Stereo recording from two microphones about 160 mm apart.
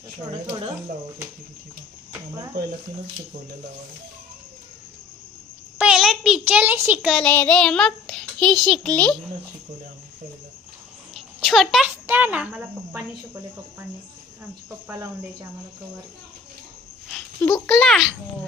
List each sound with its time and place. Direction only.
0.3 s speech: 30° right (ahead or behind)
5.7 s a sound: 5° right (ahead or behind)
7.1 s a child's voice: 5° left (ahead or behind)
11.1 s a sound: centre (ahead or behind)
12.0 s speech: 10° right (ahead or behind)
14.8 s speech: 20° right (ahead or behind)
17.4 s a child's voice: 5° left (ahead or behind)